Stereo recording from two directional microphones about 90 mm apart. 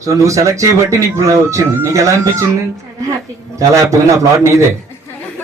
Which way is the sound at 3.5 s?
35° right (ahead or behind).